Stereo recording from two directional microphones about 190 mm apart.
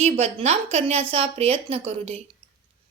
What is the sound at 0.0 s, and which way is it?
A woman's voice, 35° right (ahead or behind).